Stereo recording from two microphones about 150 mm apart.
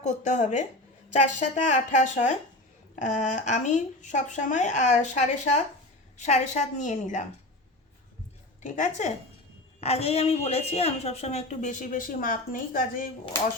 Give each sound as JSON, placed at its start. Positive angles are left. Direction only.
{"t": 0.0, "sound": "speech", "side_deg": 55}
{"t": 8.6, "sound": "speech", "side_deg": 55}